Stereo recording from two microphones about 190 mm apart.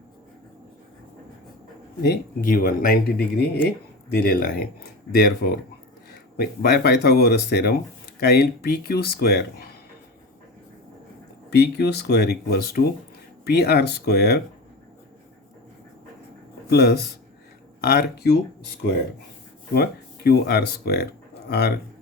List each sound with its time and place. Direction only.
2.0 s speech: 50° left (ahead or behind)
3.3 s speech: 60° left (ahead or behind)
11.5 s speech: 60° left (ahead or behind)
16.6 s speech: 55° left (ahead or behind)
19.7 s speech: 55° left (ahead or behind)